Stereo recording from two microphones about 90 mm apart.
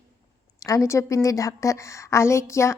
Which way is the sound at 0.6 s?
35° left (ahead or behind).